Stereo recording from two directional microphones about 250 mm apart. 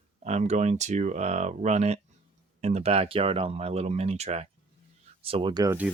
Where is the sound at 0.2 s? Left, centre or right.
Right.